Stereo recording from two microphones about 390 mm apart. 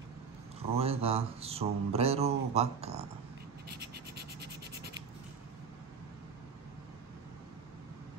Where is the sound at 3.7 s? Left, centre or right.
Right.